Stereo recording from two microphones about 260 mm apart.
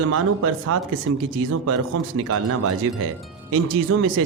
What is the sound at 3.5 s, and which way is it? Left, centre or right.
Speech, right.